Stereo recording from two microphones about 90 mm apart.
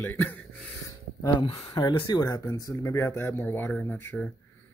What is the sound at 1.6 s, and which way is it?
Speech, 45° left (ahead or behind).